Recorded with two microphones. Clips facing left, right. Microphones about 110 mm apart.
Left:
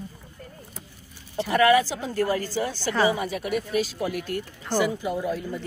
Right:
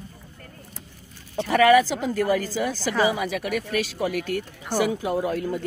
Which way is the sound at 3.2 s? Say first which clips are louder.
Right 1 dB; 90° right.